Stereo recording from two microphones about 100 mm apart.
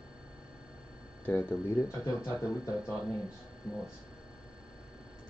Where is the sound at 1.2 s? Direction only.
20° left (ahead or behind).